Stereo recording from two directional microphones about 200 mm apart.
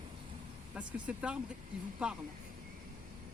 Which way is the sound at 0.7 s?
5° right (ahead or behind).